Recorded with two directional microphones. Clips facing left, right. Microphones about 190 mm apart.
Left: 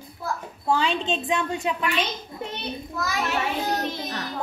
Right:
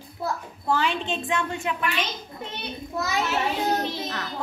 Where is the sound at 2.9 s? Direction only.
25° right (ahead or behind).